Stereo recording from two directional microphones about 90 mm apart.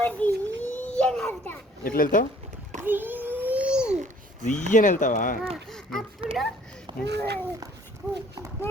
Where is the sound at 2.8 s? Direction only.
20° right (ahead or behind).